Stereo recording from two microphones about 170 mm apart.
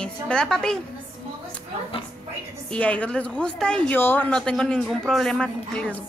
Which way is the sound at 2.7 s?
10° left (ahead or behind).